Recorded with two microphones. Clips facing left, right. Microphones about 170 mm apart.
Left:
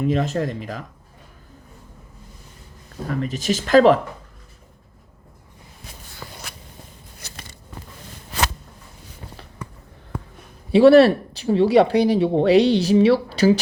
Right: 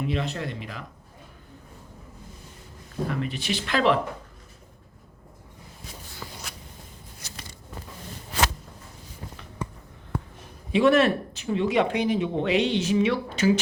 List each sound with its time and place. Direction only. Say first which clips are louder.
0.0 s speech: left 7 dB; 40° left (ahead or behind)
3.1 s speech: left 8 dB; 40° left (ahead or behind)
7.2 s a sound: left 2 dB; 60° left (ahead or behind)
10.7 s speech: left 8 dB; 35° left (ahead or behind)